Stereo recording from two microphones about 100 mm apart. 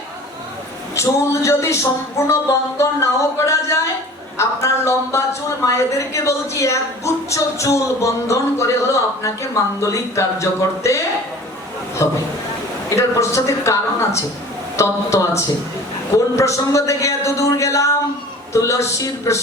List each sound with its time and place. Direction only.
0.9 s speech: 30° left (ahead or behind)